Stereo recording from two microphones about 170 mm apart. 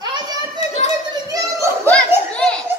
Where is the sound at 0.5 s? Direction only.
40° left (ahead or behind).